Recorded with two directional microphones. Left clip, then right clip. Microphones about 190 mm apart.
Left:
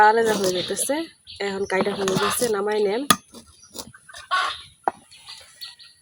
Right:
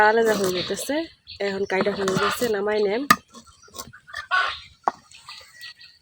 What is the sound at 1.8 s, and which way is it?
Speech, 20° left (ahead or behind).